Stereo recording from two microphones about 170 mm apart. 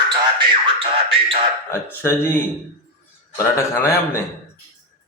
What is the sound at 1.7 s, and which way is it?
Speech, 15° left (ahead or behind).